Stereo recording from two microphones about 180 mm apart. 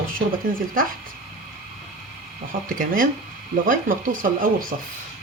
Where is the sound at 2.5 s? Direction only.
50° right (ahead or behind).